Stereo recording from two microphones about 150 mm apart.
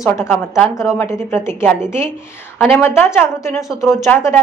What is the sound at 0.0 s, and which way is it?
A woman's voice, 15° left (ahead or behind).